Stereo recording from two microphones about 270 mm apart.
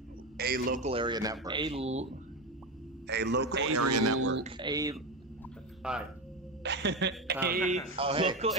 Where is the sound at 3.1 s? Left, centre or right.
Right.